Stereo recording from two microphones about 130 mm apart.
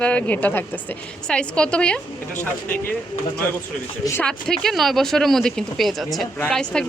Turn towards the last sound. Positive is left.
turn(degrees=5)  # may be behind; listen again after turning